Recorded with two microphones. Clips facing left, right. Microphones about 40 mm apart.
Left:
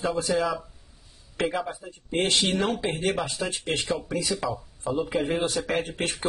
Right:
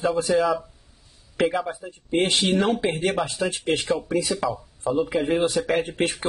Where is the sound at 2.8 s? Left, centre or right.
Right.